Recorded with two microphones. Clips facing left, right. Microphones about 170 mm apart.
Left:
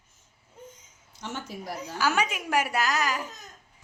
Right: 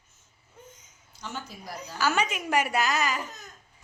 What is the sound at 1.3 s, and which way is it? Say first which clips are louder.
Speech: left 4 dB; 75° left (ahead or behind).